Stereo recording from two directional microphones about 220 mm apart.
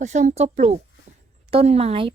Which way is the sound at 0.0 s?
30° right (ahead or behind).